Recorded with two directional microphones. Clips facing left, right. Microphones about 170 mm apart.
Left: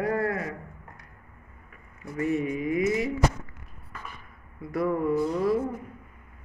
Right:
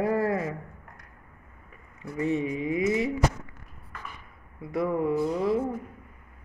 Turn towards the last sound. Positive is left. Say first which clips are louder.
# left 1 dB
turn(degrees=-20)  # may be behind; listen again after turning